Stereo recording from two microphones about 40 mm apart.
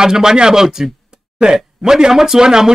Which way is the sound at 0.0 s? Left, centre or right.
Centre.